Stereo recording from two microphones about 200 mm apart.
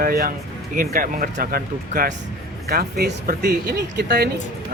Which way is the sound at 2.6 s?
50° right (ahead or behind).